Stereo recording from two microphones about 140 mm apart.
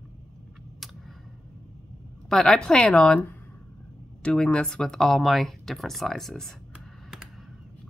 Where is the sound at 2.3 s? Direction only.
5° left (ahead or behind).